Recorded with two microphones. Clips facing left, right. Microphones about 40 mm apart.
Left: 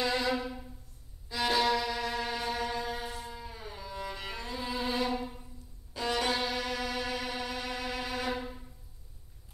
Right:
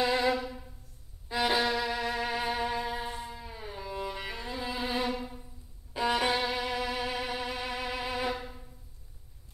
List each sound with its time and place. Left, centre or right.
0.0 s music: centre
3.3 s cello: centre
5.1 s music: centre
5.9 s violin: centre
8.3 s music: centre